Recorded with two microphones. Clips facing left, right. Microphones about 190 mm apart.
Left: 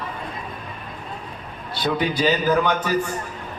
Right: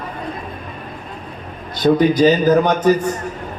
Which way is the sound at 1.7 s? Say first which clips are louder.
Right 9 dB; 45° right (ahead or behind).